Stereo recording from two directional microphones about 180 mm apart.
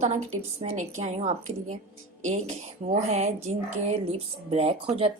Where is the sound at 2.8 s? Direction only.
35° right (ahead or behind).